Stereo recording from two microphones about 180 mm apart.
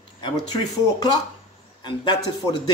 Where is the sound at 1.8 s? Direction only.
25° left (ahead or behind).